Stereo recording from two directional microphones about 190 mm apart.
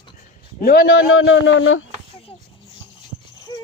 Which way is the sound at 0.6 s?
50° left (ahead or behind).